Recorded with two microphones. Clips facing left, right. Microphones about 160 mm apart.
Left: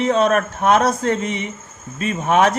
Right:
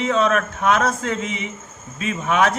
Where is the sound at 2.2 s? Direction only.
40° left (ahead or behind).